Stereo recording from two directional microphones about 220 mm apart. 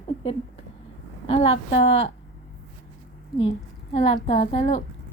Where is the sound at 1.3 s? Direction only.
25° left (ahead or behind).